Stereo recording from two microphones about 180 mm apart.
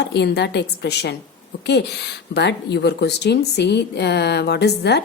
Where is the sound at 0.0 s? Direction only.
70° left (ahead or behind).